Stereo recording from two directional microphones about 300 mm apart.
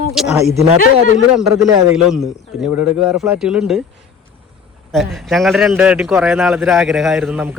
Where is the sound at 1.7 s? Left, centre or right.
Centre.